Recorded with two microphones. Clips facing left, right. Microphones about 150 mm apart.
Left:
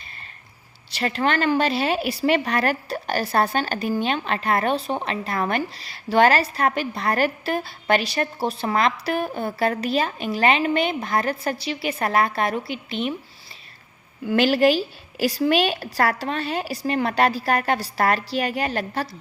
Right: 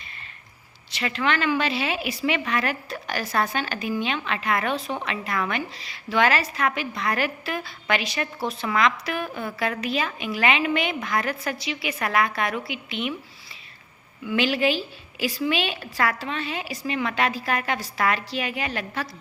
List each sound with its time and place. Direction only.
0.9 s a woman's voice: 40° left (ahead or behind)
14.3 s a woman's voice: 40° left (ahead or behind)